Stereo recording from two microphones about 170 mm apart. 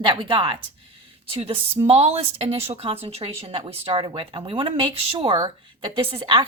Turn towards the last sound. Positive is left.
turn(degrees=-30)  # may be behind; listen again after turning